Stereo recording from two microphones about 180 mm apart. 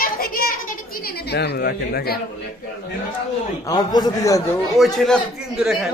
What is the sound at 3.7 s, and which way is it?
Speech, 20° left (ahead or behind).